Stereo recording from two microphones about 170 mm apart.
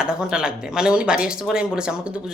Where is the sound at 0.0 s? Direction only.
5° right (ahead or behind).